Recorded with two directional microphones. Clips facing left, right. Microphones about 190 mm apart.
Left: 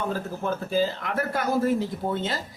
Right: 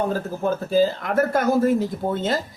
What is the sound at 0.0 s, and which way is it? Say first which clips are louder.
Speech: right 5 dB; 40° right (ahead or behind).